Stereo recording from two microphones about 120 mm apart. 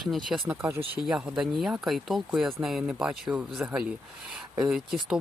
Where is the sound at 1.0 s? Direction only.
5° right (ahead or behind).